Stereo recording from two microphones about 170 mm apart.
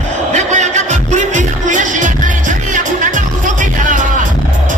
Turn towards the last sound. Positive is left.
turn(degrees=-50)  # may be behind; listen again after turning